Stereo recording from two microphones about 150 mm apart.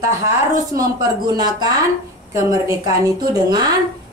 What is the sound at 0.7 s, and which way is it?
A woman's voice, 25° right (ahead or behind).